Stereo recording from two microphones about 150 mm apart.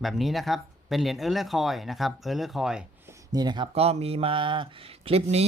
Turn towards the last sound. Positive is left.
turn(degrees=-45)  # may be behind; listen again after turning